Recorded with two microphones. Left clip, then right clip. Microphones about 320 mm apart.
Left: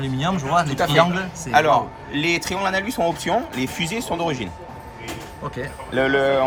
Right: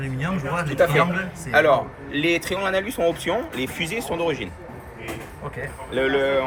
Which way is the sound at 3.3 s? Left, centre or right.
Left.